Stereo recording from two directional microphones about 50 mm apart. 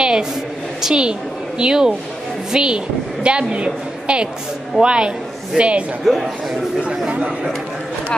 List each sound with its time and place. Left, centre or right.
0.0 s a sound: centre
0.8 s a woman's voice: centre
6.0 s a man's voice: centre
7.1 s speech: right